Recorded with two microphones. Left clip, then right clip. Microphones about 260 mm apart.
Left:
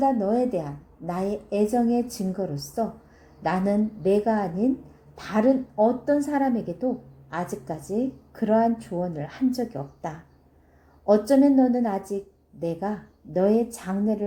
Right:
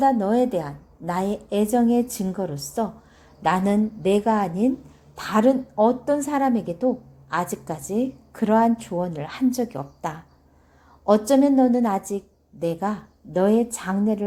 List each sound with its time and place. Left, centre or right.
0.0 s a woman's voice: right